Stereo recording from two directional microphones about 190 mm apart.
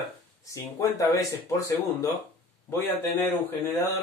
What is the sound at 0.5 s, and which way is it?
Speech, 15° left (ahead or behind).